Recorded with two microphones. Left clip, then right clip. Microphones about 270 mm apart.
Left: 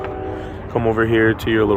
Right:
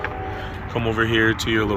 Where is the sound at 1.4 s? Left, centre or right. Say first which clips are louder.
Left 4 dB; centre.